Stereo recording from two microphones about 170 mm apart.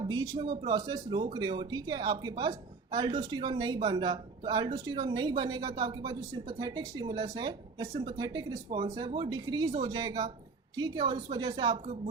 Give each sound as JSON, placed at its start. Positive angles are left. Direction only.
{"t": 0.0, "sound": "speech", "side_deg": -25}